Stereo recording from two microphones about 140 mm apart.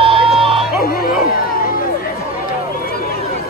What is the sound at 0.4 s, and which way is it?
Music, 40° right (ahead or behind).